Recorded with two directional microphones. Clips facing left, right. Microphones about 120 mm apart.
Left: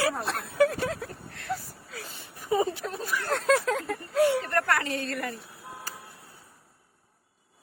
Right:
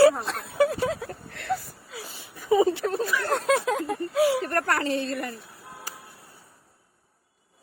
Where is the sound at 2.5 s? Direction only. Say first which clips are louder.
Right 6 dB; 85° right.